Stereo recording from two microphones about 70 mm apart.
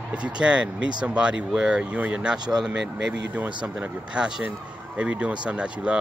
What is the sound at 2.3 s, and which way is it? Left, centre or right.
Speech, right.